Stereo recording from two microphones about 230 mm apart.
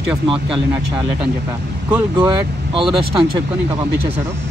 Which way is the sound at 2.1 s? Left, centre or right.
Centre.